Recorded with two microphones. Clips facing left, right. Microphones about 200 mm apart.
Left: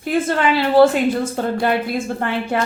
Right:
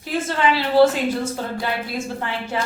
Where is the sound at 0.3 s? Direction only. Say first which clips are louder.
Left 3 dB; 55° left (ahead or behind).